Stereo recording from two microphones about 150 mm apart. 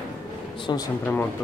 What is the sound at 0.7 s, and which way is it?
Speech, 30° left (ahead or behind).